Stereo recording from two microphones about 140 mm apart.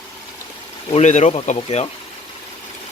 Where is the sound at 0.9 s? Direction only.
55° left (ahead or behind).